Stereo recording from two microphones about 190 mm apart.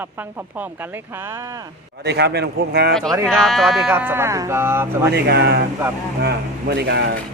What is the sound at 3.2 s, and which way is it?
Speech, centre (ahead or behind).